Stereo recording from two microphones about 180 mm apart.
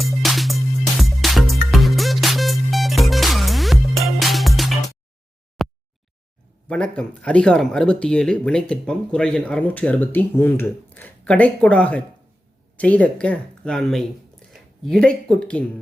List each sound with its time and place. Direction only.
0.0 s music: centre (ahead or behind)
5.6 s a sound: centre (ahead or behind)
6.7 s speech: 5° left (ahead or behind)